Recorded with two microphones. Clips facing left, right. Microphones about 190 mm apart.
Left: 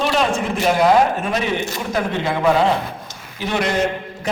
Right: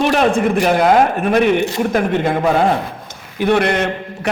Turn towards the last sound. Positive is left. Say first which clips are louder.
# right 1 dB
turn(degrees=-65)  # may be behind; listen again after turning